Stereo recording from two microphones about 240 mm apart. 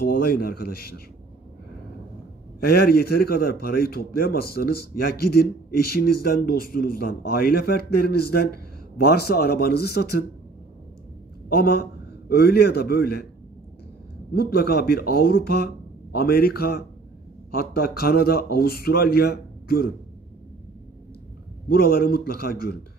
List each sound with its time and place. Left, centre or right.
0.1 s a man's voice: left
2.6 s a man's voice: left
11.4 s a man's voice: left
14.3 s a man's voice: left
21.6 s a man's voice: left